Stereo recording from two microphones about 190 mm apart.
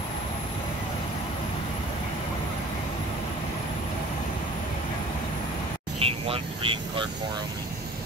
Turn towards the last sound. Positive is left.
turn(degrees=-25)  # may be behind; listen again after turning